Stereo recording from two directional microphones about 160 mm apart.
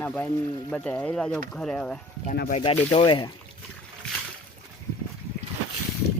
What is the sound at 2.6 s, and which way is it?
Speech, 35° left (ahead or behind).